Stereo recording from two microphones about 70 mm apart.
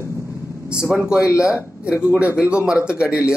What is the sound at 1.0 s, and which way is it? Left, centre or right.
A man's voice, centre.